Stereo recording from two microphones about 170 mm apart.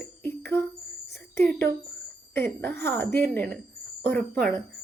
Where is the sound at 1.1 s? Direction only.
10° left (ahead or behind).